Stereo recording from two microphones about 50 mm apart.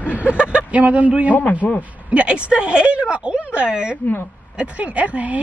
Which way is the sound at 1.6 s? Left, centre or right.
Centre.